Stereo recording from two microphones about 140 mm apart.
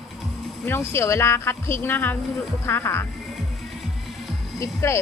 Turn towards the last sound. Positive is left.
turn(degrees=20)  # may be behind; listen again after turning